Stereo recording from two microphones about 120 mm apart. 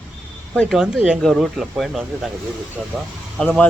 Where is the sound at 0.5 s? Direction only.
Centre (ahead or behind).